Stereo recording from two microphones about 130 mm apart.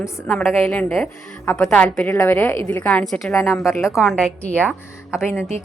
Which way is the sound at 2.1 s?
20° left (ahead or behind).